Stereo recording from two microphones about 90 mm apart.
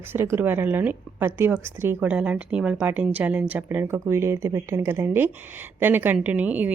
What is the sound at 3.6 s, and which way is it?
A woman's voice, 30° right (ahead or behind).